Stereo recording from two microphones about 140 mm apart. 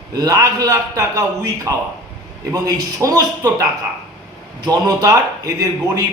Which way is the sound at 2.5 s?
25° right (ahead or behind).